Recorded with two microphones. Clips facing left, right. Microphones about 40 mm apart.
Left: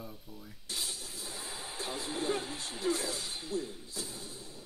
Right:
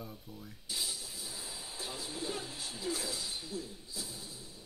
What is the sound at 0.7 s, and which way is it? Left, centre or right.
Music, left.